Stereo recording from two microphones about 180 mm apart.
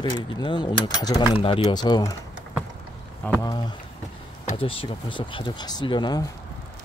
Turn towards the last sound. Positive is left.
turn(degrees=25)  # may be behind; listen again after turning